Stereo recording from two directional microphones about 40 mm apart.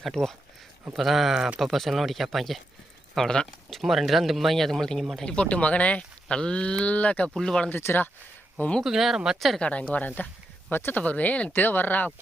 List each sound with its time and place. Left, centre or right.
0.0 s speech: centre
3.2 s speech: centre
3.7 s speech: centre
5.2 s speech: left
6.2 s speech: left
6.9 s speech: left
7.3 s speech: centre
8.8 s speech: centre
9.6 s speech: left
9.9 s speech: left
10.7 s speech: left
10.9 s speech: left
11.5 s speech: left